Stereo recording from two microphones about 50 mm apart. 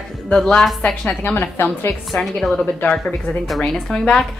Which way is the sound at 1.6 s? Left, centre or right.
Left.